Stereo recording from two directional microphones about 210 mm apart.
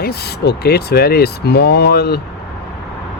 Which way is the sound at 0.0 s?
50° left (ahead or behind).